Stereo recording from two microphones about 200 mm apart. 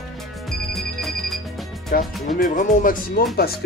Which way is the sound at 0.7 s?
Centre (ahead or behind).